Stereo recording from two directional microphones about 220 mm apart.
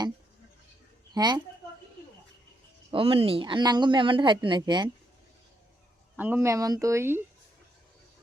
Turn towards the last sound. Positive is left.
turn(degrees=-10)  # may be behind; listen again after turning